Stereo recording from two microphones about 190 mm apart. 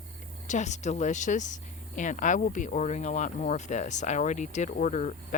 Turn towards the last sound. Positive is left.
turn(degrees=40)  # may be behind; listen again after turning